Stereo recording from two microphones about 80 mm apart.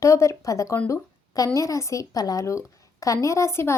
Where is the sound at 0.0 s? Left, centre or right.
Left.